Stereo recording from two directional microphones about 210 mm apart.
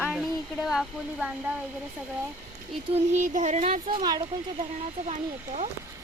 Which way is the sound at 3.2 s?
35° right (ahead or behind).